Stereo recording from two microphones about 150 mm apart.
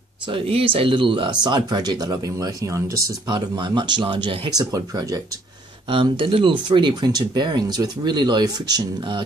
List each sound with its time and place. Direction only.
0.3 s speech: 40° right (ahead or behind)
4.6 s speech: 25° right (ahead or behind)
5.9 s speech: 35° right (ahead or behind)